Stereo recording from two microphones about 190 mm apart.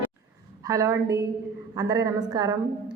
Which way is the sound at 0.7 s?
15° right (ahead or behind).